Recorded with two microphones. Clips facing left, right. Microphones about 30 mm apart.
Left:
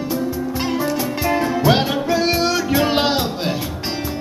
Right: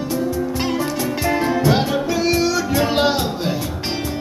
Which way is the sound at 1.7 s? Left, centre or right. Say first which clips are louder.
Left 1 dB; left.